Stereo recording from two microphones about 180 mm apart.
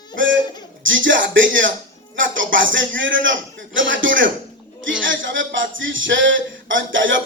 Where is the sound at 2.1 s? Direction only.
90° right.